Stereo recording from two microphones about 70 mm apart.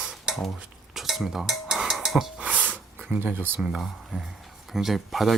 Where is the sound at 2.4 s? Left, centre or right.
Centre.